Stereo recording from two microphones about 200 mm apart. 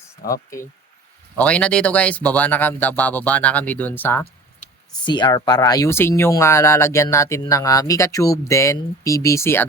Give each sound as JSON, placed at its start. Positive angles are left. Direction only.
{"t": 0.2, "sound": "speech", "side_deg": 45}
{"t": 1.4, "sound": "speech", "side_deg": 5}
{"t": 5.0, "sound": "speech", "side_deg": 20}